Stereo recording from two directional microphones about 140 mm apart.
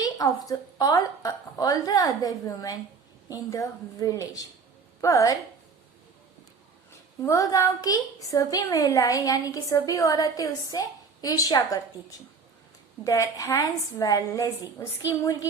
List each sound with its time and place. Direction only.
0.0 s a woman's voice: 25° left (ahead or behind)
7.2 s a woman's voice: 20° left (ahead or behind)
13.1 s a woman's voice: 25° left (ahead or behind)